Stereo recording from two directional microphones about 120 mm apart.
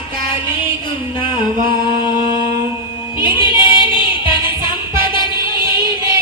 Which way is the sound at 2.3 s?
25° right (ahead or behind).